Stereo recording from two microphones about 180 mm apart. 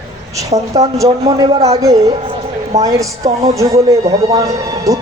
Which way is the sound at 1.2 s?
20° right (ahead or behind).